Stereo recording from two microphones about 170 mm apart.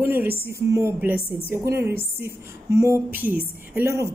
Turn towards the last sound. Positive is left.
turn(degrees=-15)  # may be behind; listen again after turning